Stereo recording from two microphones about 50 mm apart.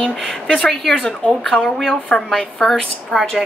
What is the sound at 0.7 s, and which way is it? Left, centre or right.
A woman's voice, centre.